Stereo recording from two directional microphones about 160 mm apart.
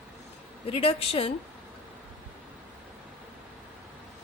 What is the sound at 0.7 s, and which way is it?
Speech, 35° left (ahead or behind).